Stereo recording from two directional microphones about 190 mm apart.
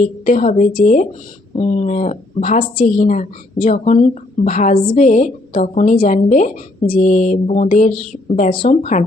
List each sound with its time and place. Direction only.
0.3 s speech: 40° left (ahead or behind)